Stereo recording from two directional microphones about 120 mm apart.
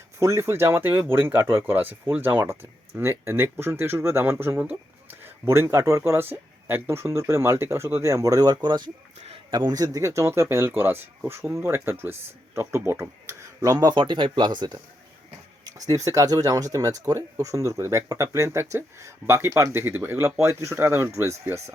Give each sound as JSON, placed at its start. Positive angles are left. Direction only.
{"t": 0.2, "sound": "speech", "side_deg": -25}